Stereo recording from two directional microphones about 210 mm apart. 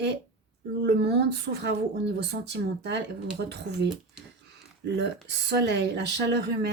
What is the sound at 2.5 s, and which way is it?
Speech, 55° right (ahead or behind).